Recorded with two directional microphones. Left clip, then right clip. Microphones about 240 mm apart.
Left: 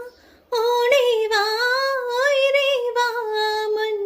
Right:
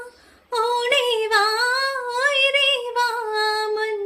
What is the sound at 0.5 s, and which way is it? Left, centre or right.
Female singing, centre.